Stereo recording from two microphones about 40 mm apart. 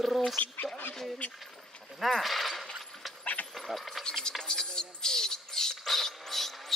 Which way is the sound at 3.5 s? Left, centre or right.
Centre.